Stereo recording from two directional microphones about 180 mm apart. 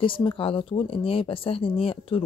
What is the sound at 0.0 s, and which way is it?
Speech, 30° left (ahead or behind).